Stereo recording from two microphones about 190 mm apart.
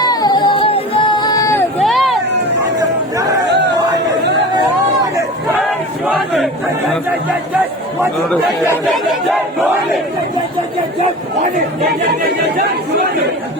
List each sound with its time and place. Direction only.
0.1 s music: 20° left (ahead or behind)
1.8 s a sound: centre (ahead or behind)
6.1 s crowd: centre (ahead or behind)
12.2 s speech: 55° right (ahead or behind)